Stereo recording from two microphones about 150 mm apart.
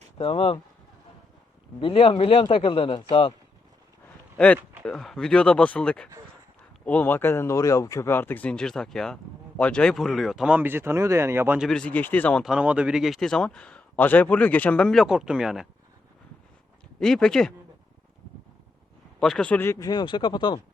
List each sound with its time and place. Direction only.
0.2 s a man's voice: 40° left (ahead or behind)
1.8 s a man's voice: 40° left (ahead or behind)
4.4 s speech: 10° left (ahead or behind); by 11.6 s 15° right (ahead or behind)
11.6 s speech: 5° left (ahead or behind)
12.5 s speech: 5° right (ahead or behind)
17.0 s speech: 5° left (ahead or behind)
19.2 s speech: 5° left (ahead or behind); by 20.6 s 30° left (ahead or behind)